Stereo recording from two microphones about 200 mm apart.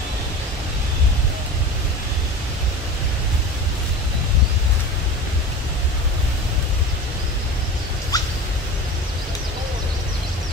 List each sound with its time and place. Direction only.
8.1 s dog: 20° left (ahead or behind)